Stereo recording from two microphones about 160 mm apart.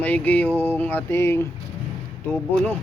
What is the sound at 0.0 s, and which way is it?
Speech, 10° left (ahead or behind).